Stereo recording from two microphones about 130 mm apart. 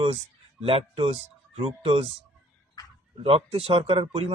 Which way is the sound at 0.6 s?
45° right (ahead or behind).